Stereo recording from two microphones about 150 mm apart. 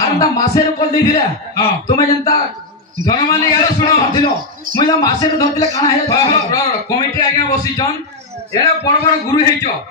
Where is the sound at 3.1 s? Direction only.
25° left (ahead or behind).